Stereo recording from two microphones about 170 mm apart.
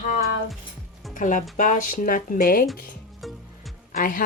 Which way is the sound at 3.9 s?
55° left (ahead or behind).